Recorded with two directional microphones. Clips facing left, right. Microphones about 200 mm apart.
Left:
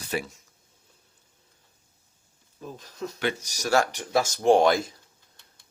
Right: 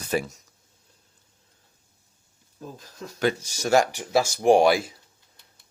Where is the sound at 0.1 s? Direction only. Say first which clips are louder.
Right 4 dB; 45° right (ahead or behind).